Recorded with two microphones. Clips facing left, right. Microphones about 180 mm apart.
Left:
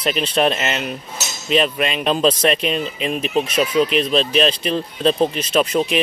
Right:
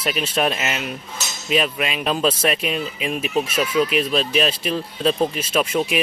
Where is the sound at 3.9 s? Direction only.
5° right (ahead or behind).